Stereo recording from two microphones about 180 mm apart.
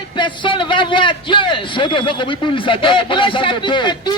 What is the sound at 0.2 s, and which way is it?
A man's voice, 25° left (ahead or behind).